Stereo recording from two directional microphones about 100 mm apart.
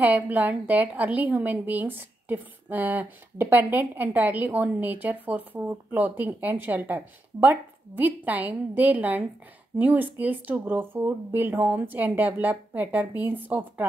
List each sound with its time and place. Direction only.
0.0 s a woman's voice: 15° right (ahead or behind)